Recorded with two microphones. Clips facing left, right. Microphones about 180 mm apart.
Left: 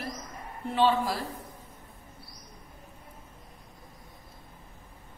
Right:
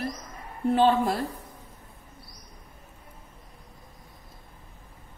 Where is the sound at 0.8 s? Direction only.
55° right (ahead or behind).